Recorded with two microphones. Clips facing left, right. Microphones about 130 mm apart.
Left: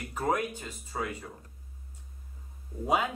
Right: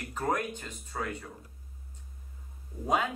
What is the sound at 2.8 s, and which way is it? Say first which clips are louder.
Speech: left 1 dB; 5° left (ahead or behind).